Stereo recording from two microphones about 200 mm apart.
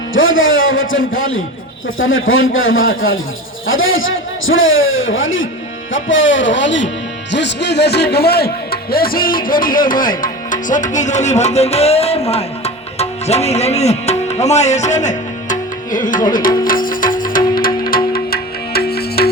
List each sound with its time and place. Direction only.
0.1 s a man's voice: 75° left (ahead or behind); by 12.2 s 30° left (ahead or behind)
12.3 s music: 30° left (ahead or behind); by 19.3 s 50° left (ahead or behind)